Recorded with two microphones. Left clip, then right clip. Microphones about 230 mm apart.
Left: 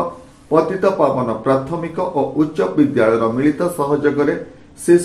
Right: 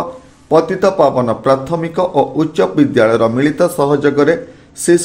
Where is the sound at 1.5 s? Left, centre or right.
Right.